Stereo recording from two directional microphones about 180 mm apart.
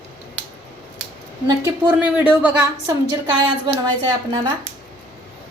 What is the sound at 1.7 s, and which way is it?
Speech, 10° right (ahead or behind).